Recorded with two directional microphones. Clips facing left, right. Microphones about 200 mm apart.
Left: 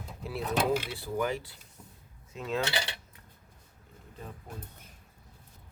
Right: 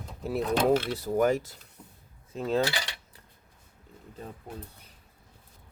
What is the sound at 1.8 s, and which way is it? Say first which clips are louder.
Drawer open or close: right 1 dB; 10° right (ahead or behind).